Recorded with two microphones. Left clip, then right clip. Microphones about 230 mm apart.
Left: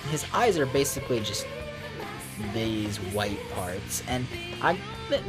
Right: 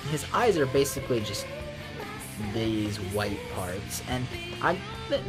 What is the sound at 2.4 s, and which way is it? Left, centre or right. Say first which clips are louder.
Speech: right 1 dB; centre.